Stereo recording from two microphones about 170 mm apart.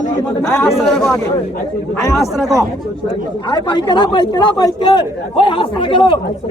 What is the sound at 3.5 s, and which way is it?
Speech, 25° left (ahead or behind).